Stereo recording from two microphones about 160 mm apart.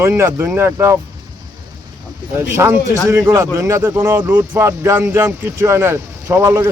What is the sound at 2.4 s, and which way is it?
A man's voice, 15° right (ahead or behind).